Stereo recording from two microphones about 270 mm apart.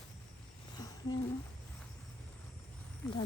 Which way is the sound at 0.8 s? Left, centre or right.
Centre.